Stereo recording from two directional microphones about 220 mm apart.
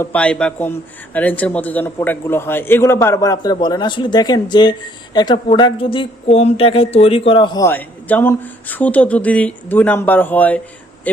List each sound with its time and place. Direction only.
0.0 s a man's voice: 5° left (ahead or behind)